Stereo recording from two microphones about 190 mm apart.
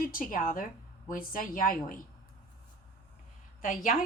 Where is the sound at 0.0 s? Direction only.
45° left (ahead or behind).